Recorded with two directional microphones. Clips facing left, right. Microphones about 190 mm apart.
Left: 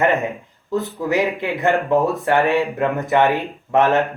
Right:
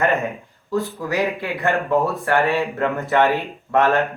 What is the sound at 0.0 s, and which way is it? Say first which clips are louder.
Speech: left 2 dB; 15° left (ahead or behind).